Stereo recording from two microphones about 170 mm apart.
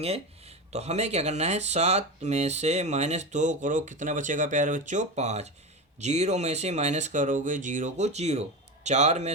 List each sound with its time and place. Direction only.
0.7 s speech: 40° right (ahead or behind)